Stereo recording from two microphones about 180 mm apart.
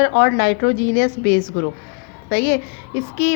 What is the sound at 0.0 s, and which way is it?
A woman's voice, 70° left (ahead or behind).